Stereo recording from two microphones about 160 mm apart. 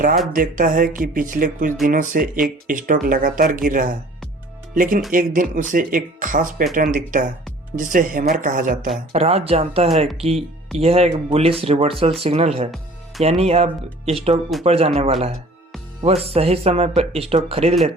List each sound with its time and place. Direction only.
0.3 s speech: 60° right (ahead or behind)
9.1 s speech: 40° right (ahead or behind)